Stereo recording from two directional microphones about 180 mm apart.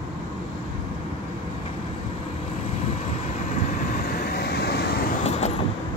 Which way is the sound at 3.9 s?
55° left (ahead or behind).